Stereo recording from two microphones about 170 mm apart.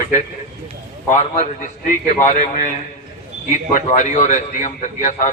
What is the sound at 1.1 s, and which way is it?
A man's voice, 50° left (ahead or behind).